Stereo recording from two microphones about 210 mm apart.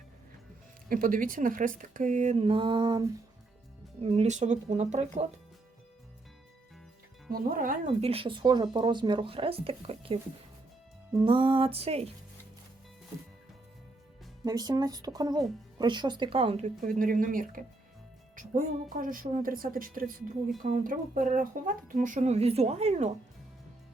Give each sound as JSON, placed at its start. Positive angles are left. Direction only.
{"t": 0.9, "sound": "speech", "side_deg": -40}
{"t": 7.3, "sound": "speech", "side_deg": -45}
{"t": 7.9, "sound": "speech", "side_deg": -25}
{"t": 11.3, "sound": "speech", "side_deg": -25}
{"t": 14.4, "sound": "speech", "side_deg": -20}